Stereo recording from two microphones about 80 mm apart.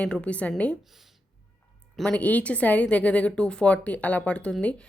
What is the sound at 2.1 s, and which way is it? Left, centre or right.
A woman's voice, centre.